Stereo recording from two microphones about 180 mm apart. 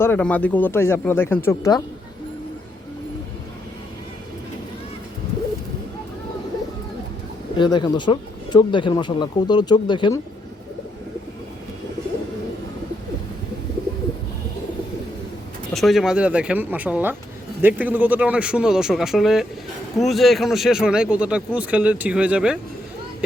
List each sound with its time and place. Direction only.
0.0 s speech: 10° left (ahead or behind)
7.5 s speech: 25° left (ahead or behind)
15.7 s speech: centre (ahead or behind)